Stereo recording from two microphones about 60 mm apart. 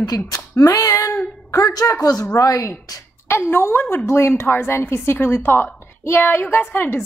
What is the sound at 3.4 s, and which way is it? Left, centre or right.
A woman's voice, left.